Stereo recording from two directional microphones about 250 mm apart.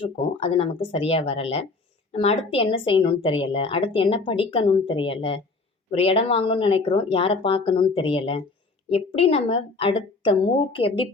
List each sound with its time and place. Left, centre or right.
0.0 s speech: left